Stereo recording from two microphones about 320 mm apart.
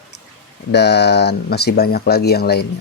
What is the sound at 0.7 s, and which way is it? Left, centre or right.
Speech, left.